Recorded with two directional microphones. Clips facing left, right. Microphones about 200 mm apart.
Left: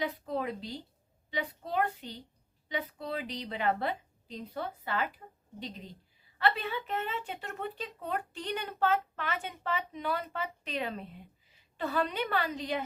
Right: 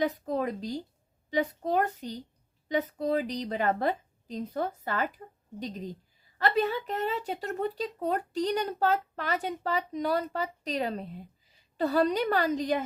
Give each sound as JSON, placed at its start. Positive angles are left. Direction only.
{"t": 0.0, "sound": "a woman's voice", "side_deg": -45}